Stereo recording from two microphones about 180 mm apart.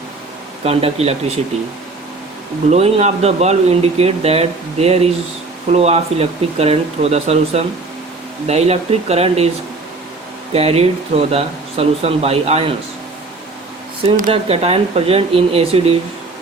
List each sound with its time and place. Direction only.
0.6 s speech: 35° right (ahead or behind)
2.6 s speech: 35° right (ahead or behind)
10.5 s speech: 35° right (ahead or behind)
14.0 s speech: 30° right (ahead or behind)